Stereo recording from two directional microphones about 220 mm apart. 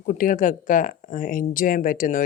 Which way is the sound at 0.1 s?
35° left (ahead or behind).